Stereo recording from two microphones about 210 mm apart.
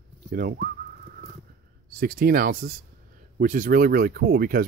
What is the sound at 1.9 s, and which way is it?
Speech, 45° right (ahead or behind).